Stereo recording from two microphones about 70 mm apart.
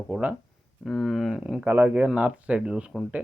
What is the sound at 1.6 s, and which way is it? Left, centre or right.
Speech, right.